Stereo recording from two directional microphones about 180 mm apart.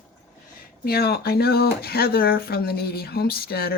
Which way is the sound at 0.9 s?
60° left (ahead or behind).